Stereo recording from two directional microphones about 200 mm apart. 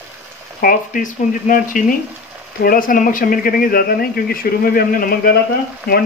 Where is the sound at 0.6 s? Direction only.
45° left (ahead or behind).